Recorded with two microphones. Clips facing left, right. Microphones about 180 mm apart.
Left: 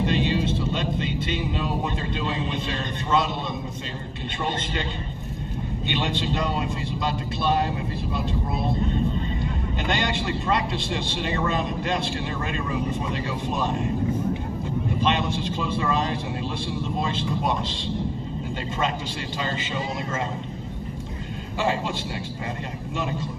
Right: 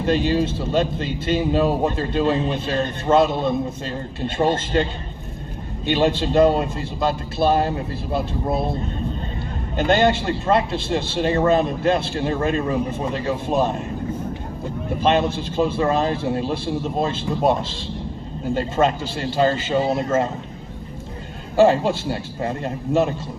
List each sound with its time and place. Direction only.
0.0 s a man's voice: 45° right (ahead or behind)
5.9 s a man's voice: 40° right (ahead or behind)
9.7 s a man's voice: 40° right (ahead or behind)
15.5 s a man's voice: 40° right (ahead or behind)
18.5 s a man's voice: 45° right (ahead or behind)
21.5 s a man's voice: 40° right (ahead or behind)